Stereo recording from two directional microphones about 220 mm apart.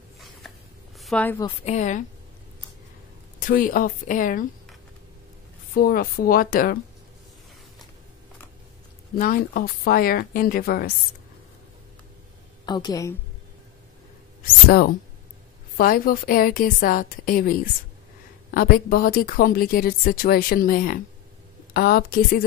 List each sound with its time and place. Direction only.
0.9 s a sound: 5° left (ahead or behind)
1.4 s a woman's voice: 30° left (ahead or behind)
3.3 s a woman's voice: 40° left (ahead or behind)
5.8 s a woman's voice: 40° left (ahead or behind)
9.1 s a woman's voice: 40° left (ahead or behind)
12.6 s a woman's voice: 20° left (ahead or behind)
14.4 s a woman's voice: 45° left (ahead or behind)